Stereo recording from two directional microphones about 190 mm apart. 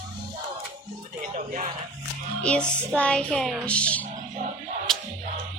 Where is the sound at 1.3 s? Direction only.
40° right (ahead or behind).